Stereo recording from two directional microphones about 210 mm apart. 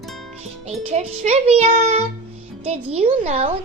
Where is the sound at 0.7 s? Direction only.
30° right (ahead or behind).